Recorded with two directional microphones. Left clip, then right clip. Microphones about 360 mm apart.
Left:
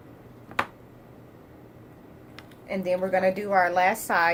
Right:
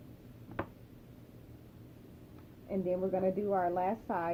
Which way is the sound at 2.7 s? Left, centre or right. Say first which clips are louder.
Left 8 dB; left.